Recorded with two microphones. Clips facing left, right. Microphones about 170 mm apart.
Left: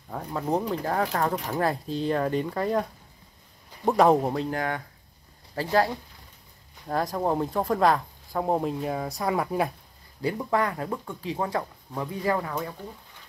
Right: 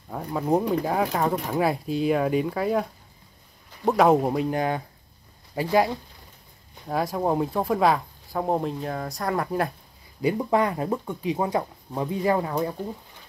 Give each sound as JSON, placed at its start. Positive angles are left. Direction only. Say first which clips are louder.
{"t": 0.1, "sound": "speech", "louder": "right 4 dB", "side_deg": -5}
{"t": 6.9, "sound": "speech", "louder": "right 1 dB", "side_deg": -5}
{"t": 10.2, "sound": "speech", "louder": "right 4 dB", "side_deg": -20}